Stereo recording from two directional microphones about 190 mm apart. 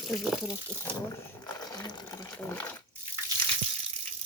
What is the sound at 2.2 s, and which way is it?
Speech, 10° left (ahead or behind).